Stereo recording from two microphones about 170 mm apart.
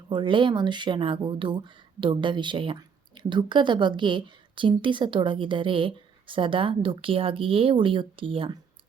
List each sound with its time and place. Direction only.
0.1 s speech: 30° right (ahead or behind)